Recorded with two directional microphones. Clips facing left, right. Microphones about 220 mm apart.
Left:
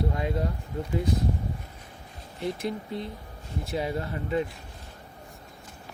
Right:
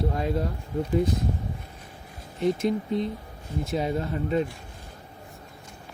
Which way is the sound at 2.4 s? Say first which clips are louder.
Right 7 dB; 20° right (ahead or behind).